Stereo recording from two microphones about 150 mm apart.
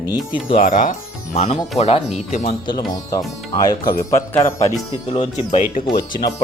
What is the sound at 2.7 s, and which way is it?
Speech, 25° left (ahead or behind).